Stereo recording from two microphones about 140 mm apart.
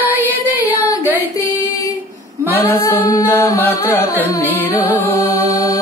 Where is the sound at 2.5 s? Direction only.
15° left (ahead or behind).